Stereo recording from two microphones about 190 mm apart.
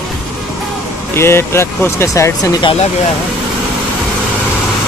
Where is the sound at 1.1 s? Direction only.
15° left (ahead or behind).